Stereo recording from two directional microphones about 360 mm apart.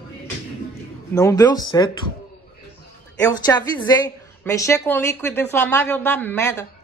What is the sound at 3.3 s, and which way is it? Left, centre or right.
A woman's voice, centre.